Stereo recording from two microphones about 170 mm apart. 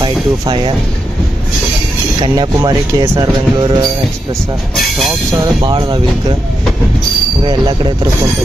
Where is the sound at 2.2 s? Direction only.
25° right (ahead or behind).